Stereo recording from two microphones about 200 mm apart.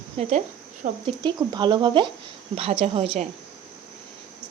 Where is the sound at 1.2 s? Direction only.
20° right (ahead or behind).